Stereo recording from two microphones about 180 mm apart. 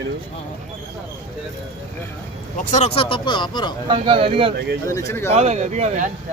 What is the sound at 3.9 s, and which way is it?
Speech, 30° right (ahead or behind).